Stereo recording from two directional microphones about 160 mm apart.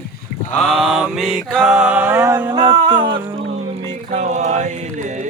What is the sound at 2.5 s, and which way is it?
Music, 30° right (ahead or behind).